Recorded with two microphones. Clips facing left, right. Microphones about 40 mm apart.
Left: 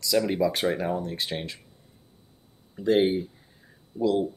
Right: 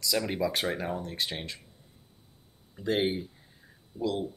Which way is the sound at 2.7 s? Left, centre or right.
Centre.